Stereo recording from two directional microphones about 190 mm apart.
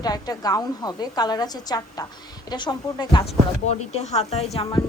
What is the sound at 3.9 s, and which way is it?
Speech, 35° left (ahead or behind).